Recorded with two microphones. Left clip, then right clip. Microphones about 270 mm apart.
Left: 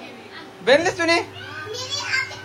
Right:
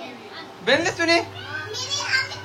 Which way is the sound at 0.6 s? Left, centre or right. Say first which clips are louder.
Left 3 dB; centre.